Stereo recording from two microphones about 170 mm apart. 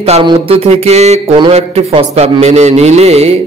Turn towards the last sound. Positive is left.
turn(degrees=-40)  # may be behind; listen again after turning